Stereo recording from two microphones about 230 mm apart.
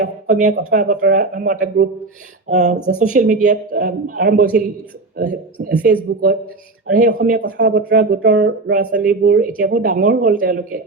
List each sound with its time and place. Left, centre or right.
0.0 s speech: right
6.8 s speech: right